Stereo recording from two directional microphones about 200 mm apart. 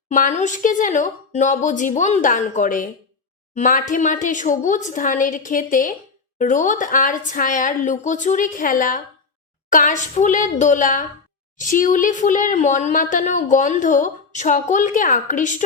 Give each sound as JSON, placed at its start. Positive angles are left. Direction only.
{"t": 0.1, "sound": "speech", "side_deg": 40}